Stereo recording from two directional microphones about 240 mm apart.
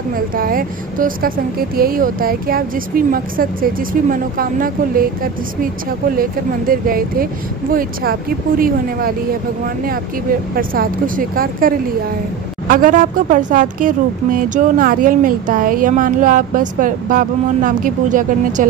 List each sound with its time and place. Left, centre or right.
0.3 s speech: right
6.7 s speech: right
10.5 s speech: right